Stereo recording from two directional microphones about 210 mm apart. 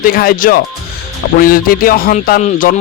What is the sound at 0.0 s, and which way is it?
Speech, 45° left (ahead or behind).